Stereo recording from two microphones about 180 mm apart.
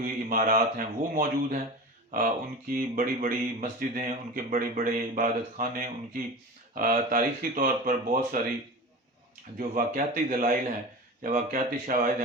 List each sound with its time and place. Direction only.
0.0 s speech: 50° right (ahead or behind)
9.6 s speech: 50° right (ahead or behind)